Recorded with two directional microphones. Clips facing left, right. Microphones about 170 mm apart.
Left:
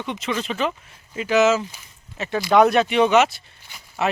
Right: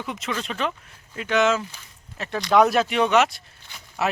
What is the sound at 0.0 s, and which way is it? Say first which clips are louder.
Speech: left 3 dB; centre (ahead or behind).